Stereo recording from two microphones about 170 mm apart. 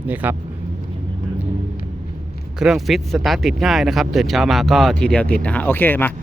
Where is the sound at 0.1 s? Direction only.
10° right (ahead or behind).